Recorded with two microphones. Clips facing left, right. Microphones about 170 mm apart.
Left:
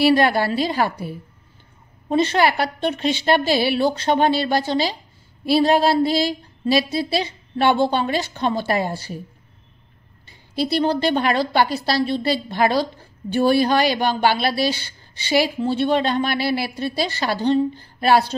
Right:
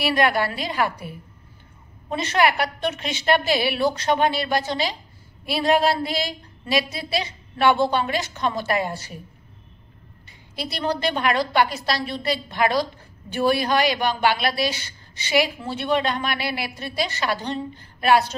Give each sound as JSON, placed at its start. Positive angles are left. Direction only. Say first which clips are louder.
{"t": 0.0, "sound": "a woman's voice", "louder": "left 5 dB", "side_deg": 30}
{"t": 10.5, "sound": "a woman's voice", "louder": "left 6 dB", "side_deg": 30}